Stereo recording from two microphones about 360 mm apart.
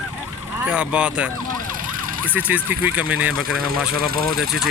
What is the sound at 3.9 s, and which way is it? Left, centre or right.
Speech, right.